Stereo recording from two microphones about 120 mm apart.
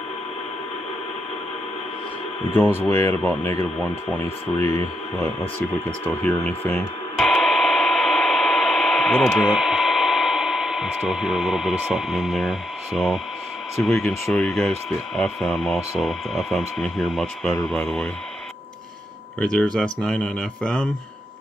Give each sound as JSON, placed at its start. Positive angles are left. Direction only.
{"t": 2.8, "sound": "speech", "side_deg": 20}
{"t": 5.6, "sound": "a sound", "side_deg": 15}
{"t": 13.8, "sound": "speech", "side_deg": 10}
{"t": 19.4, "sound": "speech", "side_deg": 5}